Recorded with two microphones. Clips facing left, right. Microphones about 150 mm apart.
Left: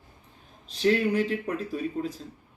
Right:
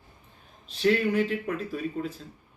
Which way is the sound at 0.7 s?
35° left (ahead or behind).